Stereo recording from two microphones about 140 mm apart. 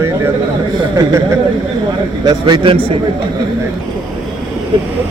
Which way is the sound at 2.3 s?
30° right (ahead or behind).